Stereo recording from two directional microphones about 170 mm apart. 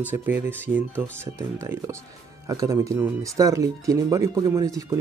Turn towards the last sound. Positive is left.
turn(degrees=-20)  # may be behind; listen again after turning